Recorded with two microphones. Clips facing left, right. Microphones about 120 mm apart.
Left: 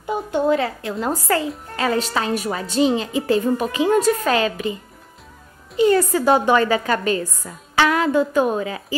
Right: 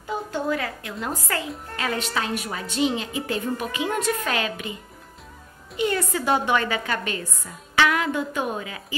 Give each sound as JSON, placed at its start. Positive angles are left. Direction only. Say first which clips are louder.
{"t": 0.0, "sound": "a woman's voice", "louder": "left 7 dB", "side_deg": 20}
{"t": 5.8, "sound": "a woman's voice", "louder": "left 8 dB", "side_deg": 35}